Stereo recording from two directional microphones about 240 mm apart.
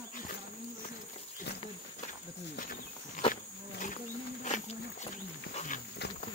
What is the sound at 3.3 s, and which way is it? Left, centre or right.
Wild animals, left.